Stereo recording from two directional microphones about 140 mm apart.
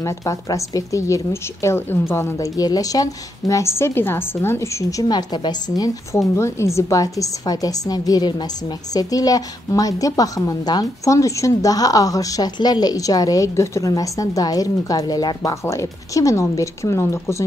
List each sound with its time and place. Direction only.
0.0 s a woman's voice: 25° left (ahead or behind)